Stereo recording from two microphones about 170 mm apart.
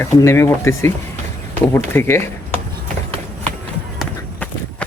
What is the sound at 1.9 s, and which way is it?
Speech, 15° left (ahead or behind).